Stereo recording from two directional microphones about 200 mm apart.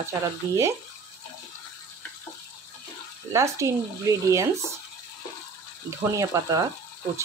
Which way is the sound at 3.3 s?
15° right (ahead or behind).